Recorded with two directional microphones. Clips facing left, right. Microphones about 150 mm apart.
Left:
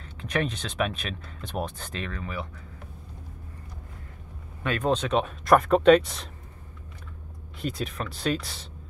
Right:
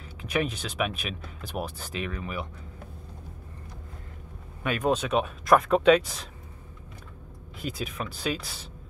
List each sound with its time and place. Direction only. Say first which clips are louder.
0.0 s speech: even; 5° right (ahead or behind)
4.6 s speech: even; 10° right (ahead or behind)
7.6 s speech: left 2 dB; 5° right (ahead or behind)